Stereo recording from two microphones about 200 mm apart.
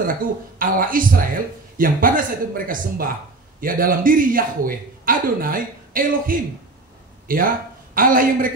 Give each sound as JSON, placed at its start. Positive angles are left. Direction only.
{"t": 0.0, "sound": "a man's voice", "side_deg": -45}